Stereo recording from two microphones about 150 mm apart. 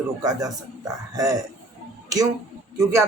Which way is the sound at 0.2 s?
25° right (ahead or behind).